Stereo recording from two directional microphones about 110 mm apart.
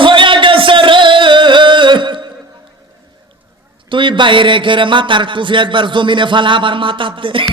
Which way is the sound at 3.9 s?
50° right (ahead or behind).